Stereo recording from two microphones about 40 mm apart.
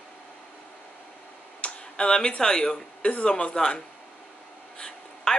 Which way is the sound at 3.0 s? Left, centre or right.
Left.